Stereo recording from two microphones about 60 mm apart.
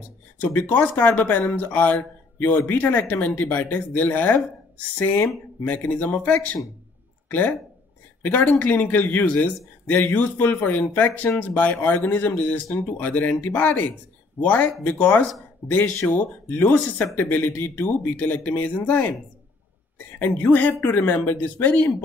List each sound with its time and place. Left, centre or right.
0.7 s a man's voice: left
5.6 s speech: left
5.9 s a man's voice: left
20.2 s a man's voice: left